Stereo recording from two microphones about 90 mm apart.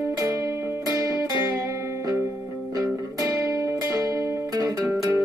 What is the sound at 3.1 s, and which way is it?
Music, 40° right (ahead or behind).